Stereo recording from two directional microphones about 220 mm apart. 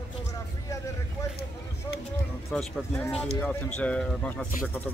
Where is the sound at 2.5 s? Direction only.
10° left (ahead or behind).